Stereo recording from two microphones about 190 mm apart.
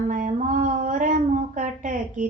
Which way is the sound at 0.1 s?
40° right (ahead or behind).